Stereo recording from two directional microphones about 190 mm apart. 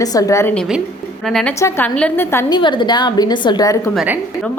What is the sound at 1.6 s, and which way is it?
Speech, 10° left (ahead or behind).